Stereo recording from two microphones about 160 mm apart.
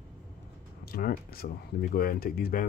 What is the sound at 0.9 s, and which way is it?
Speech, 65° left (ahead or behind).